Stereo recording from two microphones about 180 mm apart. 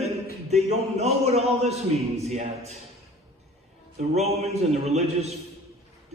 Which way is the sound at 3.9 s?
35° right (ahead or behind).